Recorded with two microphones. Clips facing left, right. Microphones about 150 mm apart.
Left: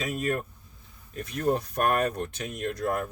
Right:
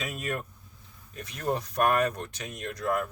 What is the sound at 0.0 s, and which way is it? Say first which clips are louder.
Speech: left 5 dB; 45° left (ahead or behind).